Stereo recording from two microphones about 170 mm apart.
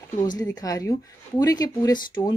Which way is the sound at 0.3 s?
20° left (ahead or behind).